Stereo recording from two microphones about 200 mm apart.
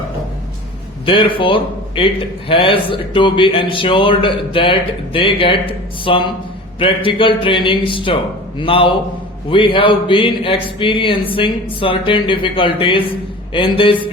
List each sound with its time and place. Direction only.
1.0 s a man's voice: 25° left (ahead or behind)